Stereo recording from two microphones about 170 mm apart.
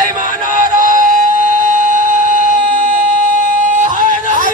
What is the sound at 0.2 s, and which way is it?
Synthetic singing, 50° right (ahead or behind).